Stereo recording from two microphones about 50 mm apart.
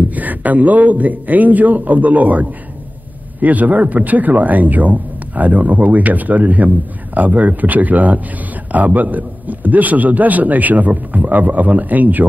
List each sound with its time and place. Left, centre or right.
0.1 s a man's voice: right